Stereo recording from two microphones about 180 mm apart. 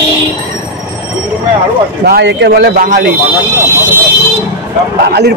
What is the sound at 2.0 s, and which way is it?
Speech, 70° right (ahead or behind).